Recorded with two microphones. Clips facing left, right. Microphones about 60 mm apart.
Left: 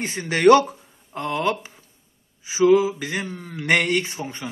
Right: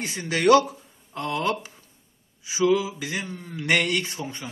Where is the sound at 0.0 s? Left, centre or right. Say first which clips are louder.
Left 5 dB; left.